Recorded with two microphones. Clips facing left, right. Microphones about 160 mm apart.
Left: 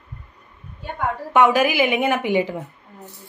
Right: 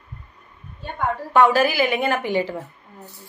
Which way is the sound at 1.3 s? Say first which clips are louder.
Even; 15° left (ahead or behind).